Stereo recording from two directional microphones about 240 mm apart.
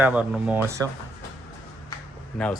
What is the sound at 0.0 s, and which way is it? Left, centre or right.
Speech, centre.